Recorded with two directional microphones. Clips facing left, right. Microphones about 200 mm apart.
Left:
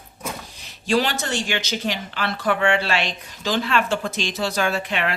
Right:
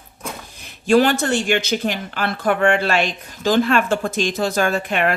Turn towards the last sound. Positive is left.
turn(degrees=-50)  # may be behind; listen again after turning